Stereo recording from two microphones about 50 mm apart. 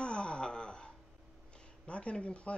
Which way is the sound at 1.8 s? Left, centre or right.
Left.